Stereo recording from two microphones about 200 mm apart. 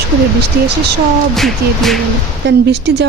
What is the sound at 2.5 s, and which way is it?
Speech, 60° right (ahead or behind).